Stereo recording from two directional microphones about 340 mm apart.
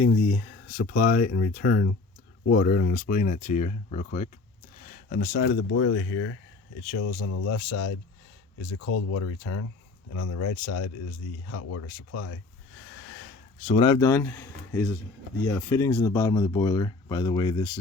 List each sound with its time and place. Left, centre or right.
0.0 s speech: left
13.7 s speech: centre